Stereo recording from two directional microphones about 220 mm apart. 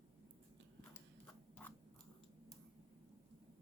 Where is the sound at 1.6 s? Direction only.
5° left (ahead or behind).